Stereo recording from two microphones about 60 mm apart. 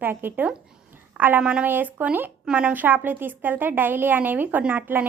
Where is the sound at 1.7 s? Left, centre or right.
Right.